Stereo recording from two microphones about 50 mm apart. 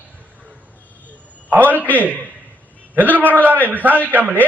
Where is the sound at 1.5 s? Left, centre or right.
Right.